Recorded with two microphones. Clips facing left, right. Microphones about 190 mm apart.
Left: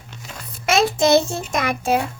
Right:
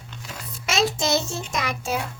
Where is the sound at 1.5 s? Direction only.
55° left (ahead or behind).